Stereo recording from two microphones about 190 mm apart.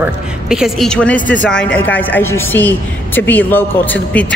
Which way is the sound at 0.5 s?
Centre (ahead or behind).